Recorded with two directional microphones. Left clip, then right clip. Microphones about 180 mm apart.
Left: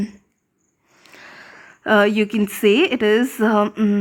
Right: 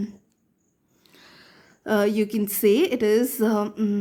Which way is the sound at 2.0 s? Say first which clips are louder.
Left 5 dB; 20° left (ahead or behind).